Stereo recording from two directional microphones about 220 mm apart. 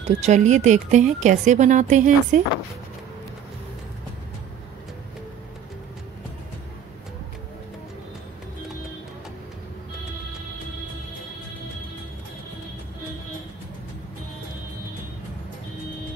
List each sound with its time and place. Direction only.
0.0 s speech: 30° right (ahead or behind)